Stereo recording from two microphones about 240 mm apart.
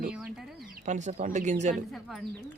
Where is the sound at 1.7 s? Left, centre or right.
Centre.